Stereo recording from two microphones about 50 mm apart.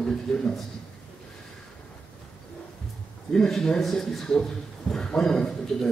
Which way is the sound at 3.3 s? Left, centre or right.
Centre.